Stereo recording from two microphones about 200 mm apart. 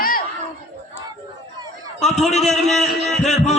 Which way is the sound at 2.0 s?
35° left (ahead or behind).